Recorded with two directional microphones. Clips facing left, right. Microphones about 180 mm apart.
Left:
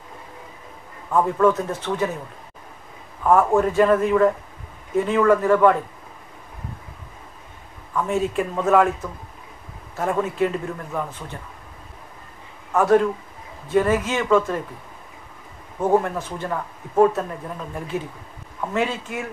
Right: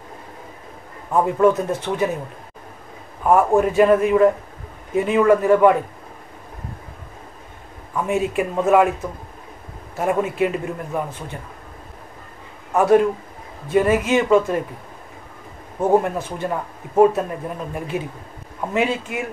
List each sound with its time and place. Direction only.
1.1 s speech: 15° right (ahead or behind)
3.3 s speech: 15° right (ahead or behind)
7.9 s speech: 15° right (ahead or behind)
9.9 s speech: 15° right (ahead or behind)
12.7 s speech: 15° right (ahead or behind)
15.8 s speech: 15° right (ahead or behind)